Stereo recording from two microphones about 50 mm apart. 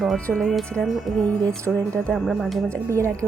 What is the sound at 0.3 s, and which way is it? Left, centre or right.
Speech, centre.